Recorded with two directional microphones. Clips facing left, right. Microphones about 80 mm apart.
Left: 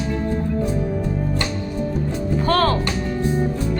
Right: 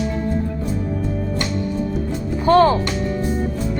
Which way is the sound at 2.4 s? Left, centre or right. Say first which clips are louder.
Right 6 dB; centre.